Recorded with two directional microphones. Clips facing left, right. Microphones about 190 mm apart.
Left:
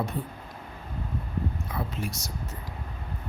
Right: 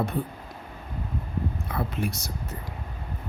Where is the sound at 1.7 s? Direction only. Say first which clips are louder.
Right 4 dB; 60° right (ahead or behind).